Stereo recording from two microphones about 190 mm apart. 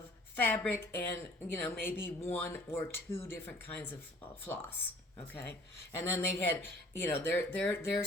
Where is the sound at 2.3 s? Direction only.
10° left (ahead or behind).